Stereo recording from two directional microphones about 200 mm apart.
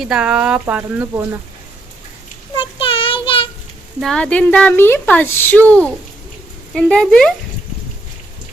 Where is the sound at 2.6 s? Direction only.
25° left (ahead or behind).